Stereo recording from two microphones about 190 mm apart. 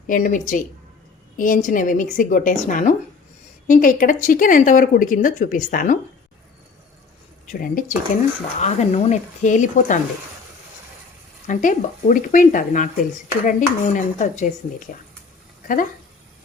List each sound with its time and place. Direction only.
0.1 s speech: 45° left (ahead or behind)
7.4 s speech: 45° left (ahead or behind)
11.4 s speech: 45° left (ahead or behind)
15.6 s speech: 45° left (ahead or behind)